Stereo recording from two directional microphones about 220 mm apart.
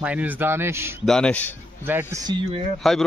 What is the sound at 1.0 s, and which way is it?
Speech, 5° left (ahead or behind).